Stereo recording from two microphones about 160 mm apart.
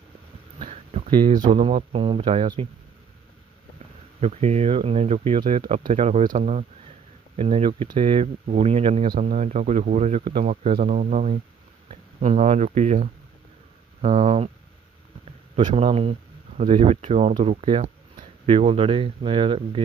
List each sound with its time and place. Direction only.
0.6 s a sound: 35° right (ahead or behind)
1.3 s speech: 50° right (ahead or behind)
1.5 s speech: 40° right (ahead or behind)
4.2 s speech: 40° right (ahead or behind)
9.0 s speech: 55° right (ahead or behind)
15.6 s speech: 40° right (ahead or behind)